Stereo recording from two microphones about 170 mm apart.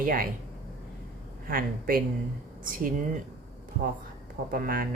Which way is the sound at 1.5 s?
55° right (ahead or behind).